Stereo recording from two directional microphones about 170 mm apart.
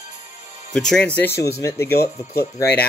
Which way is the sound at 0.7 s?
5° left (ahead or behind).